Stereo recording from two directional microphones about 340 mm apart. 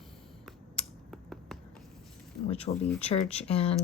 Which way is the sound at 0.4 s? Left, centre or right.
Centre.